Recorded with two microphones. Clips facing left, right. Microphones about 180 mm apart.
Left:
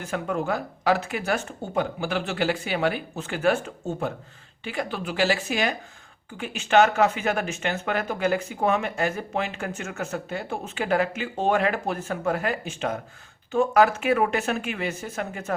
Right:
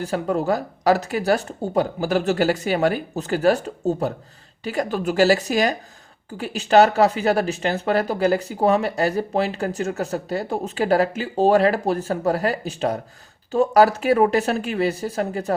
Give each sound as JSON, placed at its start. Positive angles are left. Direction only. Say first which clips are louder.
{"t": 0.0, "sound": "speech", "louder": "right 5 dB", "side_deg": -35}